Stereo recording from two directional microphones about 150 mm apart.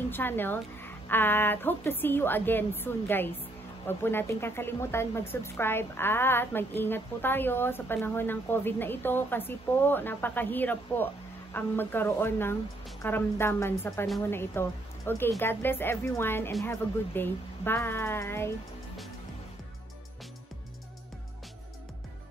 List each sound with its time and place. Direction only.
0.1 s speech: 15° left (ahead or behind)